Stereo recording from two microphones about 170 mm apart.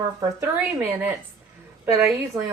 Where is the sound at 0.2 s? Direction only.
15° right (ahead or behind).